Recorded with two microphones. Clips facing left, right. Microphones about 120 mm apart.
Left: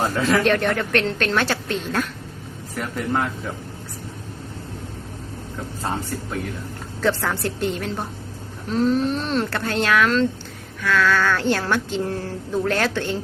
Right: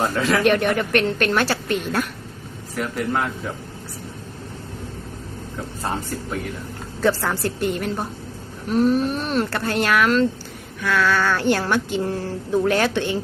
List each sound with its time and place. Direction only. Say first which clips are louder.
0.4 s speech: right 2 dB; 10° right (ahead or behind)
7.0 s speech: right 1 dB; 5° right (ahead or behind)